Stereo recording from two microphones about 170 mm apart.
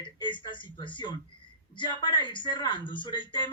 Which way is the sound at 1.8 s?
25° left (ahead or behind).